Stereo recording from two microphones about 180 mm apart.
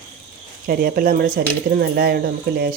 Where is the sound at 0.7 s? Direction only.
55° right (ahead or behind).